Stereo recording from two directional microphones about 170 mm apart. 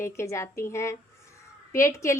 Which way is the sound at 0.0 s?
15° left (ahead or behind).